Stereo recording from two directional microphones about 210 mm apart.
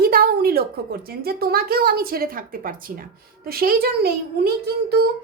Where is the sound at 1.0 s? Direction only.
45° right (ahead or behind).